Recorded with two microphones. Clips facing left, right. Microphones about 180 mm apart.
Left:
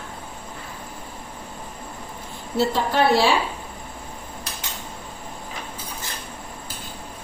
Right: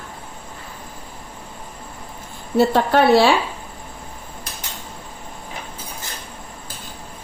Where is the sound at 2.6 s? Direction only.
60° right (ahead or behind).